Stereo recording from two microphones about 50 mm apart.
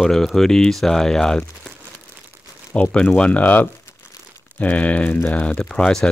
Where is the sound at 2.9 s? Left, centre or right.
Left.